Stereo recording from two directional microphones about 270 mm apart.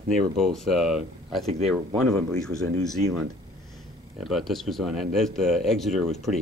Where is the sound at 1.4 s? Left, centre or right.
Right.